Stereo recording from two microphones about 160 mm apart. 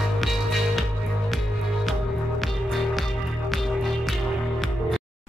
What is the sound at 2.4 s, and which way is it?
Music, centre (ahead or behind).